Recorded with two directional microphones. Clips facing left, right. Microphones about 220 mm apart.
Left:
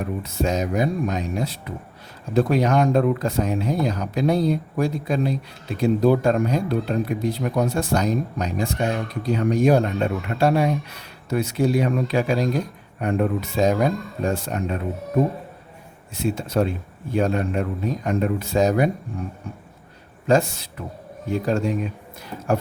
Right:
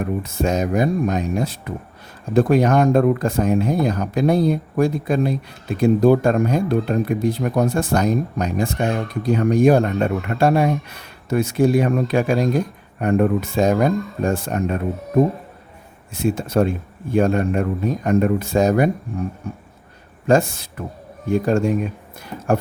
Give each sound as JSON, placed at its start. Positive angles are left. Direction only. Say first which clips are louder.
{"t": 0.0, "sound": "speech", "louder": "right 3 dB", "side_deg": -50}
{"t": 16.1, "sound": "speech", "louder": "right 3 dB", "side_deg": -50}
{"t": 20.2, "sound": "speech", "louder": "right 2 dB", "side_deg": -50}